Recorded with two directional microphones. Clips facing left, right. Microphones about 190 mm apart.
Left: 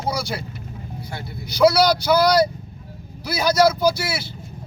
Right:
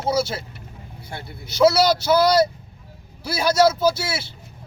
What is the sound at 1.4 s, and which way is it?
Speech, 25° right (ahead or behind).